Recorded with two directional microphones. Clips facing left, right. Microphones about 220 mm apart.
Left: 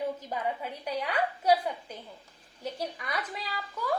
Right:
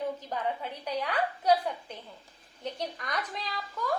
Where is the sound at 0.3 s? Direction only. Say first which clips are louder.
Even; 10° left (ahead or behind).